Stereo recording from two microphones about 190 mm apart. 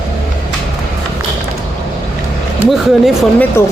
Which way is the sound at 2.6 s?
Centre (ahead or behind).